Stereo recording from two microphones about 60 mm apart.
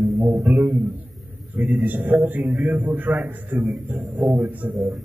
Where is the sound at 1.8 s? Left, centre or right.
Right.